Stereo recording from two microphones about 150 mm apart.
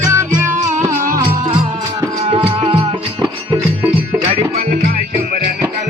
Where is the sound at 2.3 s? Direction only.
35° right (ahead or behind).